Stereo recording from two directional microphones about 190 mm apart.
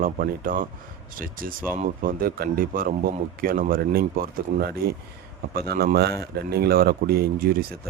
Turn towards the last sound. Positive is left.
turn(degrees=-50)  # may be behind; listen again after turning